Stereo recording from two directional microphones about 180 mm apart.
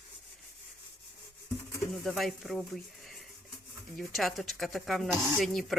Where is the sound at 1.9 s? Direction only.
Centre (ahead or behind).